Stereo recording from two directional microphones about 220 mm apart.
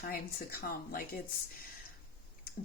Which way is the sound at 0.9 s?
40° left (ahead or behind).